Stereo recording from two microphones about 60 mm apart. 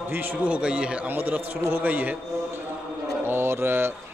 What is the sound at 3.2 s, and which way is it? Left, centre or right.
Mantra, right.